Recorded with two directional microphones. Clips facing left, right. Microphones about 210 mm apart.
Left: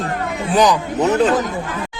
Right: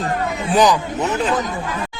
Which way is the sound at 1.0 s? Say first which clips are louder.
Left 9 dB; 35° left (ahead or behind).